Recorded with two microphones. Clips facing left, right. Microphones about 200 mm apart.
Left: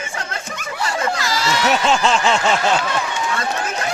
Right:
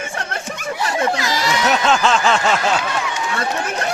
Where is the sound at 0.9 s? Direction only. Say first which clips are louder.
Right 2 dB; 20° right (ahead or behind).